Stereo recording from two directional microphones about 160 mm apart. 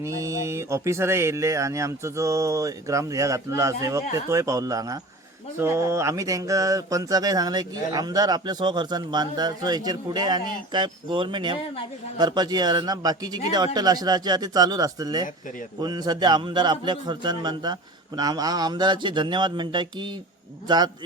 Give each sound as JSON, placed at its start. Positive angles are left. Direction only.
{"t": 0.0, "sound": "speech", "side_deg": -20}